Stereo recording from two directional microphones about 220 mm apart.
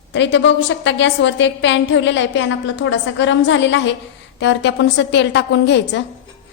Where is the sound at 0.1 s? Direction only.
55° left (ahead or behind).